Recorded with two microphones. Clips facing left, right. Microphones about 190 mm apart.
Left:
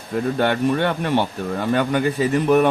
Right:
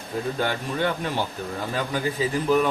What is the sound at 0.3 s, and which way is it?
Speech, 65° left (ahead or behind).